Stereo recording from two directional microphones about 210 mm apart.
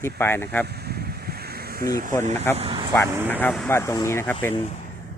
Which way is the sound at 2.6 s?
25° right (ahead or behind).